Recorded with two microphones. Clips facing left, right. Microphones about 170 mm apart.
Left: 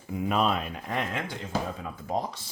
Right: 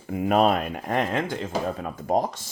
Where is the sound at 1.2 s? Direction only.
65° right (ahead or behind); by 2.5 s 45° right (ahead or behind).